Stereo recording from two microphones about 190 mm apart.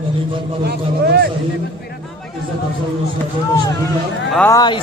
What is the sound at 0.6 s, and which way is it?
Speech, 55° right (ahead or behind).